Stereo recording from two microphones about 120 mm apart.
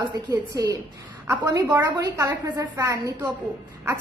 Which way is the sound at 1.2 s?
15° right (ahead or behind).